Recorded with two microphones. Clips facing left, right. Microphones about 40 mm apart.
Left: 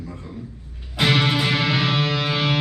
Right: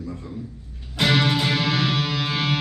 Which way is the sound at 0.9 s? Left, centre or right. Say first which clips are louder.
Left 1 dB; centre.